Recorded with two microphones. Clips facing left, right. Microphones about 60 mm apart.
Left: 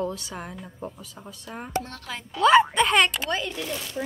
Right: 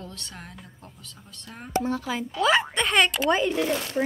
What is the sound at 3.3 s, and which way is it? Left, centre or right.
Speech, centre.